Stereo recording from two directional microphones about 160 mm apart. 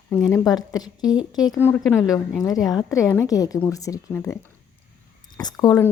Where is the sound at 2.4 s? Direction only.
25° left (ahead or behind).